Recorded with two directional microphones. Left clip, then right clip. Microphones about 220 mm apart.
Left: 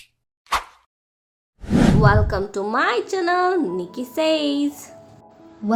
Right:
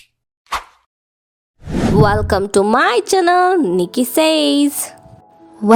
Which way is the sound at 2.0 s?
45° right (ahead or behind).